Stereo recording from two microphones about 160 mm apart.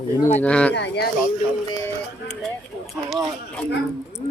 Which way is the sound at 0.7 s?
90° left.